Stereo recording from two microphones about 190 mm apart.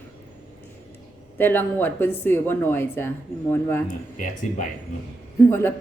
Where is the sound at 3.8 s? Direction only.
45° left (ahead or behind).